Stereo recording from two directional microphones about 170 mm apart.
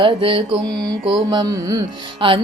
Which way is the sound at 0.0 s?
30° right (ahead or behind).